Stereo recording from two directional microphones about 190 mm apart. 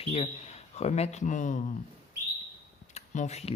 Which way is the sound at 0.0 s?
35° left (ahead or behind).